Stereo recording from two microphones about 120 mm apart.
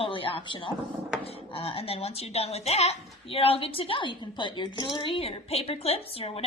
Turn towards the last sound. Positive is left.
turn(degrees=55)  # may be behind; listen again after turning